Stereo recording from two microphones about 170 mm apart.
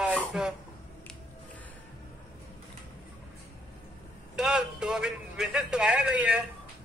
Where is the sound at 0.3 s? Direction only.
5° right (ahead or behind).